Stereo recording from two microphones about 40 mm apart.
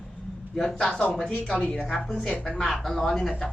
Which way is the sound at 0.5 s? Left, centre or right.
Centre.